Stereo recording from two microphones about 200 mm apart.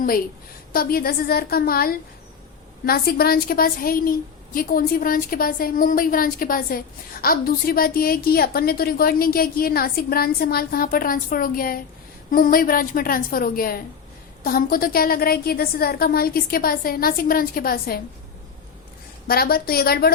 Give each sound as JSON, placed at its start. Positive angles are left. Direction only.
{"t": 0.7, "sound": "a woman's voice", "side_deg": 45}
{"t": 19.3, "sound": "a woman's voice", "side_deg": 50}